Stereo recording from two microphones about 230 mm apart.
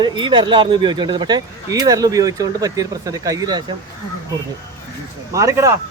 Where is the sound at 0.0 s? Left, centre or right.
Centre.